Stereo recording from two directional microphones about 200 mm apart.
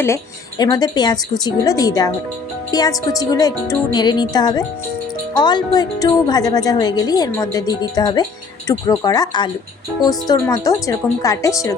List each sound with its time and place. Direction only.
0.6 s a woman's voice: 20° left (ahead or behind)